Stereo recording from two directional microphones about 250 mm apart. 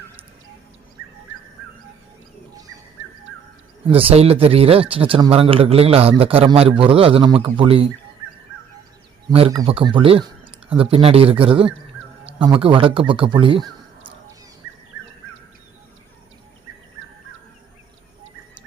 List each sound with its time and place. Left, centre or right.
3.8 s speech: right
9.3 s speech: centre